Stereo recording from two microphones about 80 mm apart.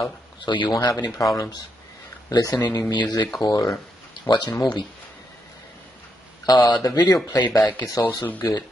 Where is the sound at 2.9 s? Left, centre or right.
Left.